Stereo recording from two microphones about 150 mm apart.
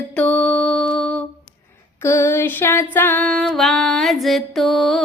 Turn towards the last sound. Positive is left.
turn(degrees=0)  # may be behind; listen again after turning